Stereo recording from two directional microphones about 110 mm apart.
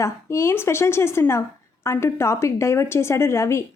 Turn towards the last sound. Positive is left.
turn(degrees=25)  # may be behind; listen again after turning